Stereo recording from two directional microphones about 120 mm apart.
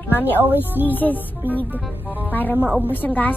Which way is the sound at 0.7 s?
15° right (ahead or behind).